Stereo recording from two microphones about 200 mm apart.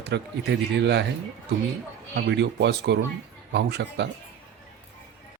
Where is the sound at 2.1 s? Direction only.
60° right (ahead or behind).